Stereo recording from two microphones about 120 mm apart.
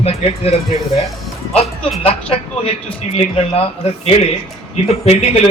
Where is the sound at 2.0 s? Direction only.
55° left (ahead or behind).